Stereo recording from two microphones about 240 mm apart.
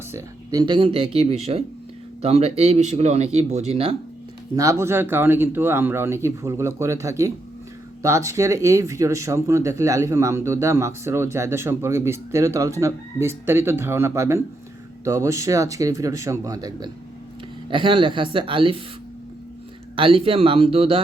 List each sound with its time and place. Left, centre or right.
0.1 s speech: centre
4.5 s speech: centre
20.0 s speech: right